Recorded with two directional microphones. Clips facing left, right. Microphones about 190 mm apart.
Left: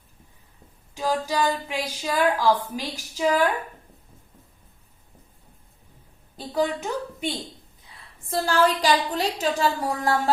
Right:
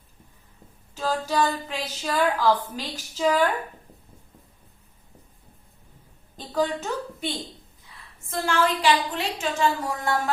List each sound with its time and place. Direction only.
0.9 s a woman's voice: 15° left (ahead or behind)
6.3 s a woman's voice: 10° left (ahead or behind)
8.3 s a woman's voice: 35° left (ahead or behind)